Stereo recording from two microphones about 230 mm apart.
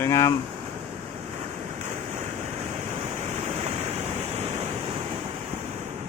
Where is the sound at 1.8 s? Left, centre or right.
Right.